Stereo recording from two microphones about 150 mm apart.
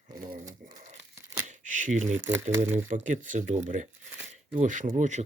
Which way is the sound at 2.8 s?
60° right (ahead or behind).